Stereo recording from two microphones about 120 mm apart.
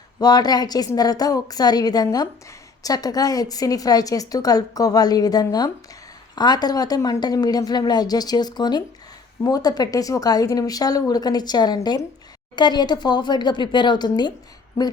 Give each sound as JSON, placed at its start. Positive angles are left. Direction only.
{"t": 0.2, "sound": "a woman's voice", "side_deg": 35}